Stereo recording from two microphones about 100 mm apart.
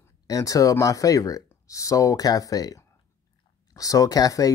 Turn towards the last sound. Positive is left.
turn(degrees=35)  # may be behind; listen again after turning